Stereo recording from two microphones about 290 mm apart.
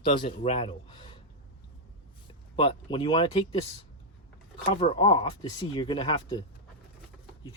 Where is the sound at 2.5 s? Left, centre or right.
Centre.